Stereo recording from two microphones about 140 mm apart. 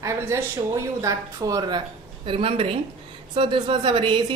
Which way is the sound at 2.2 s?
40° right (ahead or behind).